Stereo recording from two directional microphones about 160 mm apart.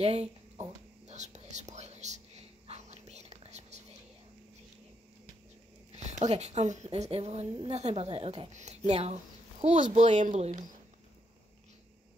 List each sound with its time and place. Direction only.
0.0 s whispering: 40° right (ahead or behind)
5.9 s a woman's voice: 45° right (ahead or behind)